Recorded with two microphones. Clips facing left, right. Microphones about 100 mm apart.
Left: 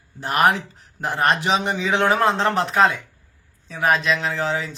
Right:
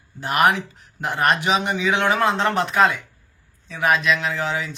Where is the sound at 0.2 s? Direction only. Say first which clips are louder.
Even; 35° left (ahead or behind).